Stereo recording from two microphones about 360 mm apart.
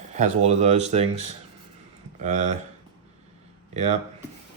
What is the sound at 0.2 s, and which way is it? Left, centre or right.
Speech, centre.